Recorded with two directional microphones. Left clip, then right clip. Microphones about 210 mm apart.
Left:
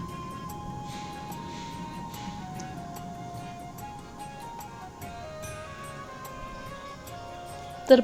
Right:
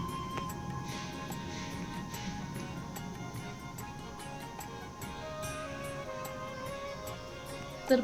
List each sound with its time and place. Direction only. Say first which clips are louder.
7.9 s speech: left 10 dB; 35° left (ahead or behind)